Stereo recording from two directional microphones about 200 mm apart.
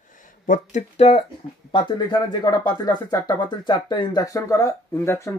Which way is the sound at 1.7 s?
25° left (ahead or behind).